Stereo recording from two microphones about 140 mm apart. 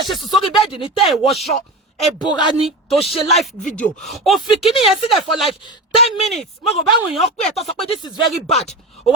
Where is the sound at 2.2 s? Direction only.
30° left (ahead or behind).